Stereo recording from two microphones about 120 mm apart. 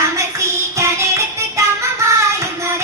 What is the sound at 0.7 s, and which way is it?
Music, 25° right (ahead or behind).